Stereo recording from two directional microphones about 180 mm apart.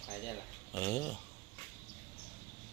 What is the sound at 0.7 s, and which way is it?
Speech, 10° left (ahead or behind).